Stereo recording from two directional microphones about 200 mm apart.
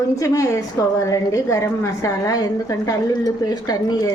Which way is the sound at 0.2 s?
15° left (ahead or behind).